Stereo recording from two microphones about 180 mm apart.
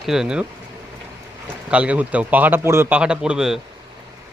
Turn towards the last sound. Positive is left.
turn(degrees=-5)  # may be behind; listen again after turning